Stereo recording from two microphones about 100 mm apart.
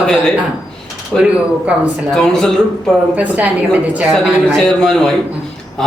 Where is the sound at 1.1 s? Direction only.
5° right (ahead or behind).